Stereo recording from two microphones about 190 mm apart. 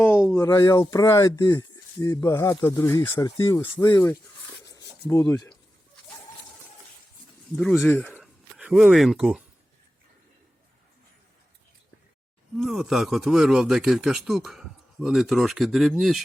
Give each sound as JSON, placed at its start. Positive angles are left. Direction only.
{"t": 0.3, "sound": "speech", "side_deg": 15}
{"t": 4.6, "sound": "a sound", "side_deg": 20}
{"t": 7.5, "sound": "speech", "side_deg": 0}
{"t": 12.5, "sound": "speech", "side_deg": 0}